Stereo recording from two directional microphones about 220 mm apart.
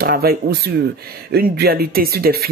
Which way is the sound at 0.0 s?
40° right (ahead or behind).